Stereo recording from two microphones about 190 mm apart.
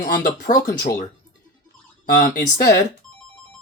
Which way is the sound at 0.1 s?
50° left (ahead or behind).